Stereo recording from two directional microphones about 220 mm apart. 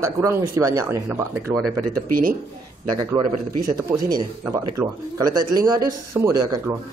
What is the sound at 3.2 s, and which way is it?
A man's voice, 25° right (ahead or behind).